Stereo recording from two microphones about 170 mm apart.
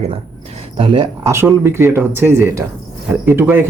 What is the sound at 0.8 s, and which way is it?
Speech, 30° right (ahead or behind).